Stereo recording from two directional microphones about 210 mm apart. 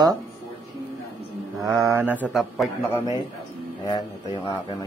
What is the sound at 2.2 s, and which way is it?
Speech, centre (ahead or behind).